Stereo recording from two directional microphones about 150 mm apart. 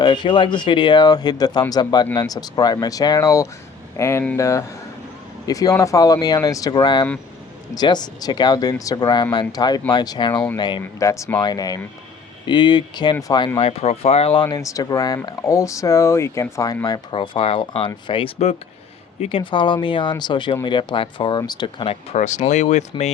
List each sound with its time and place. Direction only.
0.0 s speech: 30° left (ahead or behind)
11.0 s speech: 20° left (ahead or behind)
13.6 s speech: 40° left (ahead or behind)
14.4 s speech: 20° left (ahead or behind)
22.1 s speech: 50° left (ahead or behind)